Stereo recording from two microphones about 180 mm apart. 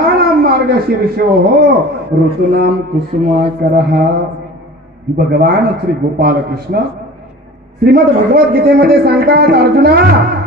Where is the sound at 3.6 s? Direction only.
65° right (ahead or behind).